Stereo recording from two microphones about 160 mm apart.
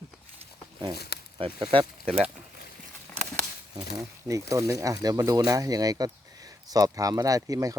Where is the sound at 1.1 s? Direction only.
85° left.